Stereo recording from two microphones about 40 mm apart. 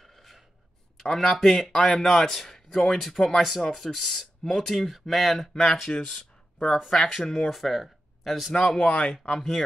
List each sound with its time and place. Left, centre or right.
0.0 s a sound: centre
1.1 s a man's voice: centre
5.5 s a man's voice: centre
8.7 s speech: left
9.1 s a man's voice: centre